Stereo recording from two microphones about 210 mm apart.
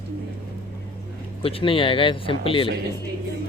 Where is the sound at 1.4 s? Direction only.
25° left (ahead or behind).